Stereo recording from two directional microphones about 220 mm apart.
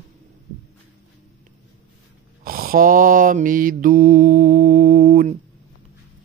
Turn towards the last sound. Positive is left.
turn(degrees=-40)  # may be behind; listen again after turning